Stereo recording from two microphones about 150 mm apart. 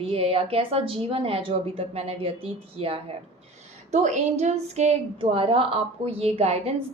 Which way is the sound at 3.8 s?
50° right (ahead or behind).